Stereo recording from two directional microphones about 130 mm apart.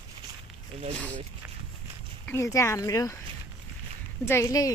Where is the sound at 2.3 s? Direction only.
25° left (ahead or behind).